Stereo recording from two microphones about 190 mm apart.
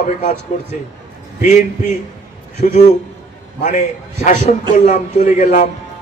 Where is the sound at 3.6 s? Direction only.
40° left (ahead or behind).